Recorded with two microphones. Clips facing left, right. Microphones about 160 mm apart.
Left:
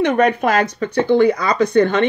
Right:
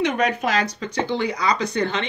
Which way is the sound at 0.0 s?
55° left (ahead or behind).